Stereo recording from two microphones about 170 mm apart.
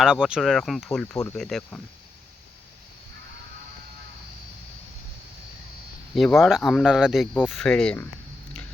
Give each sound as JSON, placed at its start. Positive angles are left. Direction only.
{"t": 0.0, "sound": "speech", "side_deg": -5}
{"t": 1.1, "sound": "speech", "side_deg": 15}
{"t": 1.4, "sound": "speech", "side_deg": 0}
{"t": 6.1, "sound": "speech", "side_deg": 0}